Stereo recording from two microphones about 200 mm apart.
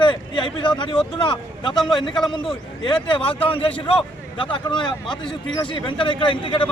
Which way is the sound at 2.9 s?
25° left (ahead or behind).